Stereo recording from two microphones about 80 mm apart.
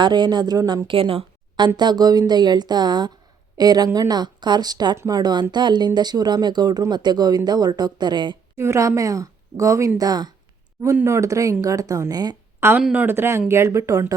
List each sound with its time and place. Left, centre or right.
0.0 s speech: right
0.9 s speech: right
1.5 s speech: right
3.8 s speech: right
4.1 s speech: right
8.5 s speech: right
10.0 s speech: right
11.0 s speech: right
12.5 s a sound: right
12.9 s speech: right